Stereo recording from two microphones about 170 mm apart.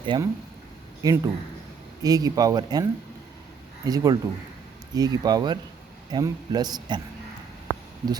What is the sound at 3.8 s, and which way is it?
Speech, 20° right (ahead or behind).